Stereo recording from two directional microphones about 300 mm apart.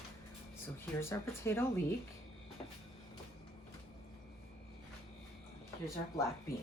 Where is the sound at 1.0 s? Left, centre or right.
Centre.